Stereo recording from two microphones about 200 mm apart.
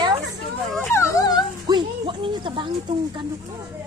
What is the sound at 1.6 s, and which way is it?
Music, 25° right (ahead or behind).